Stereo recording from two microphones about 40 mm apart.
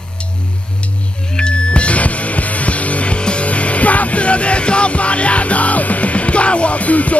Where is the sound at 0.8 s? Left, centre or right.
Left.